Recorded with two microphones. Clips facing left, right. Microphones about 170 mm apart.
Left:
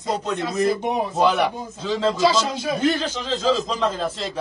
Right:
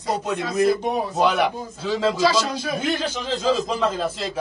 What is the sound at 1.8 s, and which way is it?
Speech, 5° right (ahead or behind).